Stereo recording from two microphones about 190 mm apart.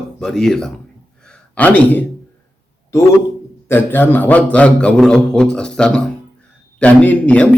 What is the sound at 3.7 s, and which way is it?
Speech, 10° left (ahead or behind).